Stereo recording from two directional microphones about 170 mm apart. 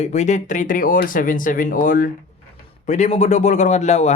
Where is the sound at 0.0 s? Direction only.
45° left (ahead or behind).